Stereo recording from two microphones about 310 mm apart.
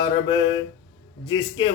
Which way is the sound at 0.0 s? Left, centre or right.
Centre.